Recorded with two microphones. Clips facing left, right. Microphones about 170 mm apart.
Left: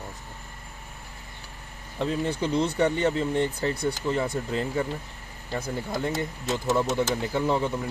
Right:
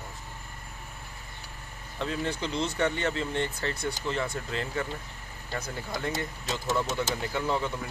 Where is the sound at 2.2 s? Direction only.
10° left (ahead or behind).